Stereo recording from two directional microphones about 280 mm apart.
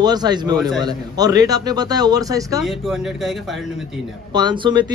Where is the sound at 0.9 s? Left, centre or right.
Centre.